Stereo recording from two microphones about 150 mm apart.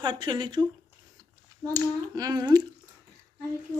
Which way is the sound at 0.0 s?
30° right (ahead or behind).